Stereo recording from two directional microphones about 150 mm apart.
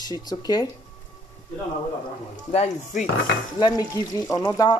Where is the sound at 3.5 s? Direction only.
25° left (ahead or behind).